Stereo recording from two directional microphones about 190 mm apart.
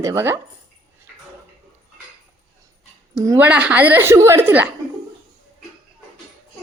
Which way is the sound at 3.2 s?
15° right (ahead or behind).